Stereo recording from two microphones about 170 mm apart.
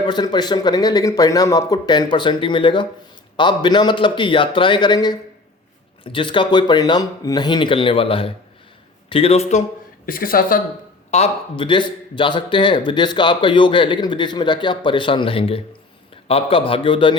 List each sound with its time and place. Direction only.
0.0 s a man's voice: 25° left (ahead or behind); by 9.6 s 40° left (ahead or behind)
10.1 s speech: 55° left (ahead or behind)
11.1 s a man's voice: 35° left (ahead or behind)